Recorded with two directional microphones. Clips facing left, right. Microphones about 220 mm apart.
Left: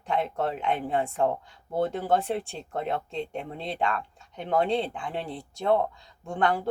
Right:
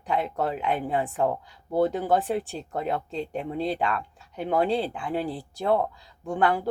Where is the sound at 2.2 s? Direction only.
Centre (ahead or behind).